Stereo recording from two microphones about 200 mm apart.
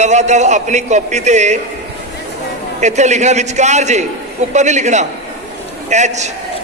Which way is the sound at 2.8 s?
35° right (ahead or behind).